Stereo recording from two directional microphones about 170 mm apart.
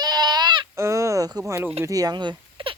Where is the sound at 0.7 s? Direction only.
15° right (ahead or behind).